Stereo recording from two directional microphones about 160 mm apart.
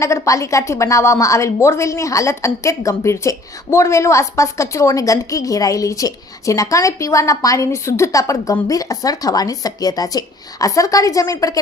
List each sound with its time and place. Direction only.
0.0 s a woman's voice: 20° left (ahead or behind)